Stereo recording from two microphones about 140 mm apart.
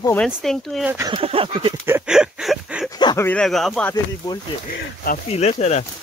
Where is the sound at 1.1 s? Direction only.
45° right (ahead or behind).